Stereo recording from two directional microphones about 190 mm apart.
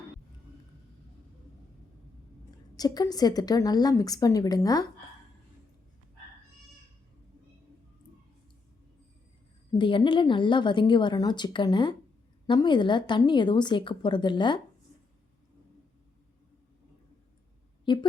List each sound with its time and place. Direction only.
2.7 s a woman's voice: 20° left (ahead or behind)
9.7 s a woman's voice: 25° left (ahead or behind)
17.9 s a woman's voice: 25° left (ahead or behind)